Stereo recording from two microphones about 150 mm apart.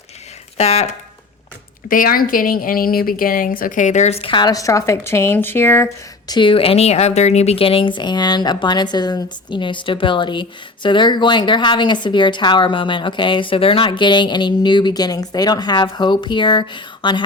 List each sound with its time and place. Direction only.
0.5 s speech: 45° left (ahead or behind)
1.9 s a woman's voice: 70° left (ahead or behind); by 6.3 s 15° left (ahead or behind)
6.3 s speech: 35° left (ahead or behind)